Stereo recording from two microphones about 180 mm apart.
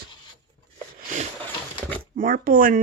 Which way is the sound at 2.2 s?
50° right (ahead or behind).